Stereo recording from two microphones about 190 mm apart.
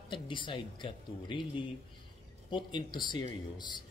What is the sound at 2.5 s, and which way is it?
A man's voice, 25° left (ahead or behind).